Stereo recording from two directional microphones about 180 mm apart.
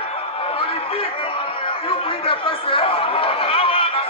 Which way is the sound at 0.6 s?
30° left (ahead or behind).